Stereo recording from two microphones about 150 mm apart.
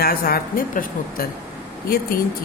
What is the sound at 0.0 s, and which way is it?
A woman's voice, 85° left.